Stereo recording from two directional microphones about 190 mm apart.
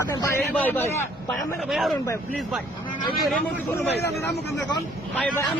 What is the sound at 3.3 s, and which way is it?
Speech, 10° left (ahead or behind).